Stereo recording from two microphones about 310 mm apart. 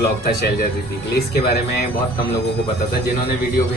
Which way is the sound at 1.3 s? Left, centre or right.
Left.